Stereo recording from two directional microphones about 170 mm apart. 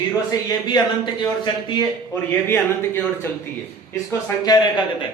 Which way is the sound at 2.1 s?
10° left (ahead or behind).